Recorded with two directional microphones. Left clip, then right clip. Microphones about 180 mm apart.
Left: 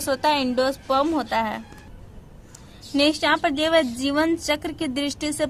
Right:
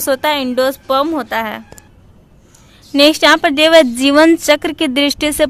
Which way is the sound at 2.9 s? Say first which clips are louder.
Right 11 dB; 30° right (ahead or behind).